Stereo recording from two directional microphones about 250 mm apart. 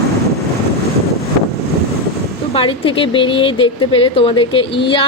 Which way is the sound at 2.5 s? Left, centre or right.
Left.